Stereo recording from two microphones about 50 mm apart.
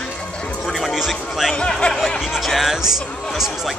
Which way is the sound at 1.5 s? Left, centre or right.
Centre.